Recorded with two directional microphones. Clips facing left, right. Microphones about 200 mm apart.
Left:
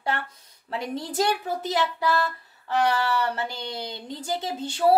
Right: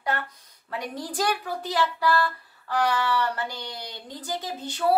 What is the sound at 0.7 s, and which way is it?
A woman's voice, 25° left (ahead or behind).